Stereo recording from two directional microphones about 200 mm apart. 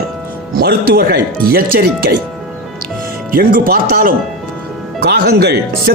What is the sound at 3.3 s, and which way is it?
Speech, 45° right (ahead or behind).